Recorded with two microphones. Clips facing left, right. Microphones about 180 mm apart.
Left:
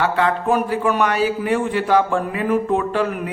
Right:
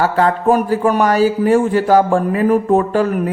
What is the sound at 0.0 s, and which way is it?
A man's voice, 40° right (ahead or behind).